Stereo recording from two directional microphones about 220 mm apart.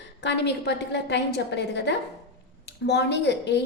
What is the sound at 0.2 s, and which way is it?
A woman's voice, 50° left (ahead or behind).